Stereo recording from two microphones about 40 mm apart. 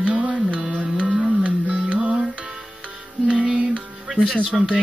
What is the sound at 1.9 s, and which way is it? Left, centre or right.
Music, right.